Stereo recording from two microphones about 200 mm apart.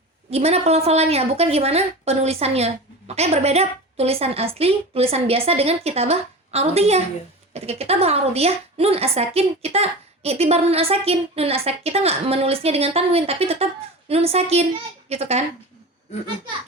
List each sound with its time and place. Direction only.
0.3 s a woman's voice: 30° right (ahead or behind)